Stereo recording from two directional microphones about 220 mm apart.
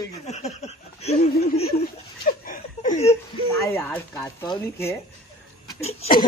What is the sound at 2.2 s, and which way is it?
Chuckle, 40° left (ahead or behind).